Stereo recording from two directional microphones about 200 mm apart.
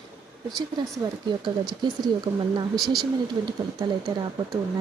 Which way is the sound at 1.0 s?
15° right (ahead or behind).